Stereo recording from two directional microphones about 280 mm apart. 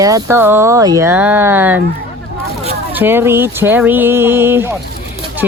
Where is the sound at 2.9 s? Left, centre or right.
Centre.